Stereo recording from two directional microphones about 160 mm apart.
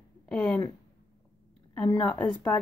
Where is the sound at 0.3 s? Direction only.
5° left (ahead or behind).